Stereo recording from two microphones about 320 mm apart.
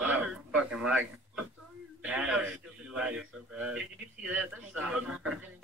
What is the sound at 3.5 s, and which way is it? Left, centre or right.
A man's voice, centre.